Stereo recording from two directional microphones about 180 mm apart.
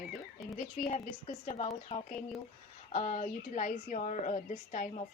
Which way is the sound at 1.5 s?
35° left (ahead or behind).